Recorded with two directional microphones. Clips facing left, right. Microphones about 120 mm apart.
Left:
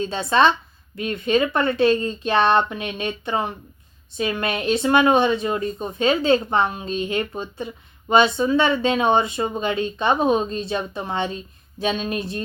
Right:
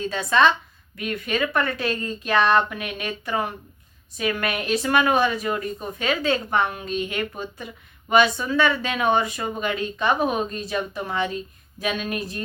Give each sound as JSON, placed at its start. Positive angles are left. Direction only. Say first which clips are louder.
{"t": 0.0, "sound": "speech", "louder": "left 2 dB", "side_deg": 30}